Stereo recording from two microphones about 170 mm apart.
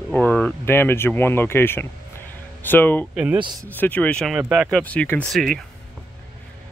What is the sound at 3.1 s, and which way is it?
Speech, 5° right (ahead or behind).